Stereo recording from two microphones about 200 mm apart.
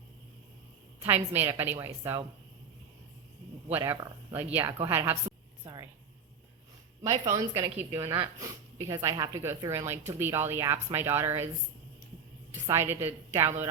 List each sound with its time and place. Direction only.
1.0 s a woman's voice: 10° right (ahead or behind)
3.7 s a woman's voice: 10° right (ahead or behind)
5.6 s a sound: 20° right (ahead or behind)
7.0 s a woman's voice: 20° right (ahead or behind)
8.0 s speech: 25° right (ahead or behind)
8.8 s a woman's voice: 15° right (ahead or behind)
12.6 s a woman's voice: 15° right (ahead or behind)